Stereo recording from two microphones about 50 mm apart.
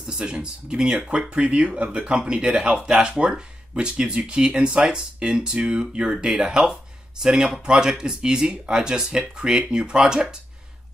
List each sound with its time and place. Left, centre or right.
0.0 s speech: centre